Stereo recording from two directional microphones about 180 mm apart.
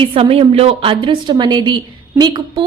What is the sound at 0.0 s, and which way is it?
A woman's voice, 30° right (ahead or behind).